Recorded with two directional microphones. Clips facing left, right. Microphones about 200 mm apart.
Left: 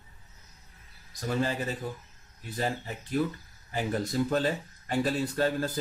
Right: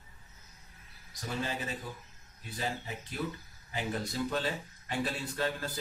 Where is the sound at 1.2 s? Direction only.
50° left (ahead or behind).